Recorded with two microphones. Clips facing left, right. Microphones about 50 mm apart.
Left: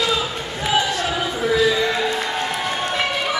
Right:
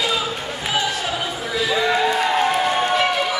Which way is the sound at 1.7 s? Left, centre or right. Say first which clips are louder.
Right 1 dB; centre.